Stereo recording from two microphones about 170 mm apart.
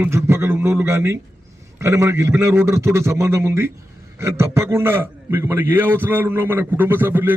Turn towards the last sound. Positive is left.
turn(degrees=-10)  # may be behind; listen again after turning